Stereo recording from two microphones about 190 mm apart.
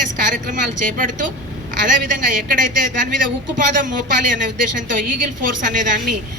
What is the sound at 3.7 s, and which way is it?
A woman's voice, 45° right (ahead or behind).